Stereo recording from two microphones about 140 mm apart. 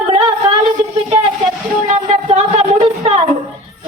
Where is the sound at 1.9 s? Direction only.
55° right (ahead or behind).